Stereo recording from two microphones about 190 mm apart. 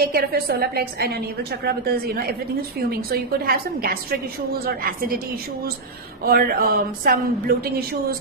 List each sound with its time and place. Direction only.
0.0 s a woman's voice: 50° right (ahead or behind)
6.2 s a woman's voice: 50° right (ahead or behind)